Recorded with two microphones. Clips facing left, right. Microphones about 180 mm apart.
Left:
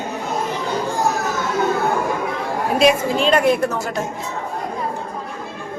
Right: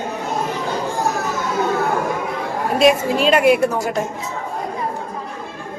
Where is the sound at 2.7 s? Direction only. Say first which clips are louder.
Right 1 dB; 5° right (ahead or behind).